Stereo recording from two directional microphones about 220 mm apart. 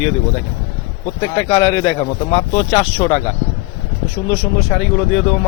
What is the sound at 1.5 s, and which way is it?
Speech, 10° left (ahead or behind).